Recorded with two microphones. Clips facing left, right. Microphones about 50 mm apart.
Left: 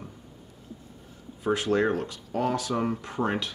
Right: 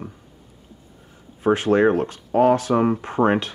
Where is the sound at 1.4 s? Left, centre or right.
Right.